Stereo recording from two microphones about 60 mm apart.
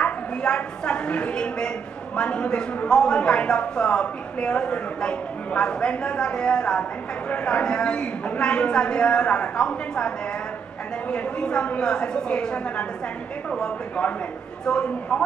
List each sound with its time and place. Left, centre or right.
0.0 s speech: centre